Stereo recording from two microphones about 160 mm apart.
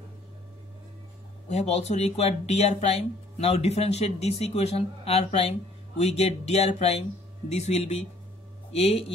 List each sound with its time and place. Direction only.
1.5 s speech: 45° left (ahead or behind)